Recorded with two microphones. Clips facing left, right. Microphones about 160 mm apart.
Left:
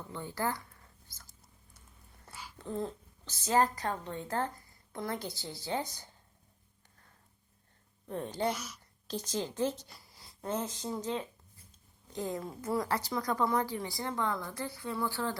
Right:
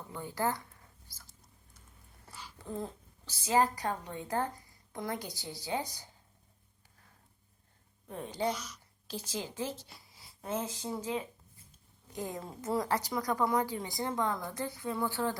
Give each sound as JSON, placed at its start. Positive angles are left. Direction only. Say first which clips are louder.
{"t": 0.1, "sound": "a sound", "louder": "right 2 dB", "side_deg": -15}
{"t": 3.2, "sound": "a woman's voice", "louder": "even", "side_deg": -10}
{"t": 8.5, "sound": "a woman's voice", "louder": "left 1 dB", "side_deg": 10}
{"t": 9.0, "sound": "a woman's voice", "louder": "left 3 dB", "side_deg": -5}